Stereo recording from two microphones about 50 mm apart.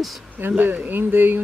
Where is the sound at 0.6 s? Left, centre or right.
Right.